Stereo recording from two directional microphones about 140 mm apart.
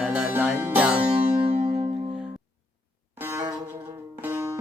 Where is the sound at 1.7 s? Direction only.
50° right (ahead or behind).